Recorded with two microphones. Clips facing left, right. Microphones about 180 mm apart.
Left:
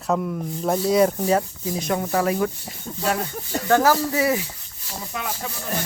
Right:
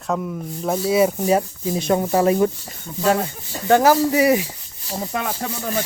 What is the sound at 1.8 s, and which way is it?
Speech, 30° right (ahead or behind).